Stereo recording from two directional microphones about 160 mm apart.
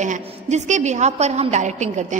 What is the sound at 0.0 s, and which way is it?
A woman's voice, 50° right (ahead or behind).